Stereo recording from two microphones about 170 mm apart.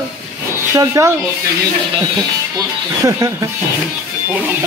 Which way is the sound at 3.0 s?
20° right (ahead or behind).